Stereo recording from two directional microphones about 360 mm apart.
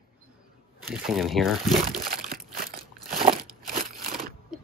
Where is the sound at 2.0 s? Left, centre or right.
Right.